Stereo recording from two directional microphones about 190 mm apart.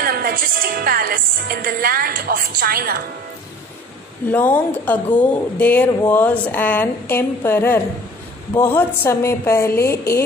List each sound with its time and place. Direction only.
0.0 s music: 50° right (ahead or behind)
4.3 s speech: 10° left (ahead or behind)